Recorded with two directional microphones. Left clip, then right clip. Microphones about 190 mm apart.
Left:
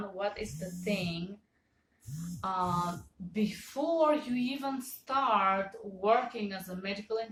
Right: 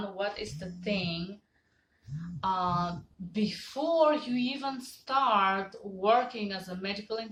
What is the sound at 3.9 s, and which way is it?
Speech, 15° right (ahead or behind).